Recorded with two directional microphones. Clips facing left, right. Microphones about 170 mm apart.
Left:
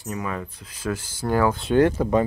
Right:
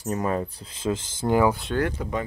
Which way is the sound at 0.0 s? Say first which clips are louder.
Right 4 dB; 35° right (ahead or behind).